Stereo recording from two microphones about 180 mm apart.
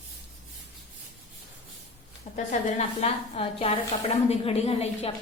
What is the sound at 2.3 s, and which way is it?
A woman's voice, 45° left (ahead or behind).